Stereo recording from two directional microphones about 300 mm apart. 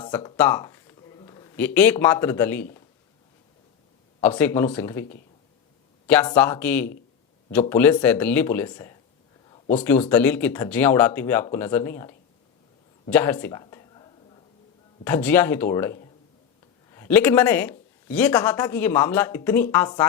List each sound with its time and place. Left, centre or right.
0.0 s speech: centre
4.2 s speech: centre
6.1 s speech: centre
9.5 s a sound: left
10.1 s speech: centre
13.1 s a sound: centre
15.0 s speech: centre